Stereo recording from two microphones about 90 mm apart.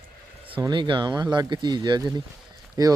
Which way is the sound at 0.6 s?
60° right (ahead or behind).